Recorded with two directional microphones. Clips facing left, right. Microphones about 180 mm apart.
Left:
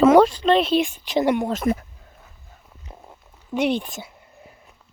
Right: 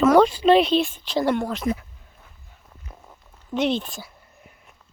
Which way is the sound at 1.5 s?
45° left (ahead or behind).